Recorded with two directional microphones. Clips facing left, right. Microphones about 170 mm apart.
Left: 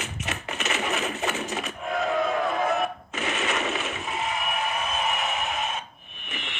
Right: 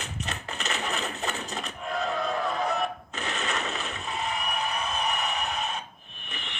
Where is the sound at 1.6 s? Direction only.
Centre (ahead or behind).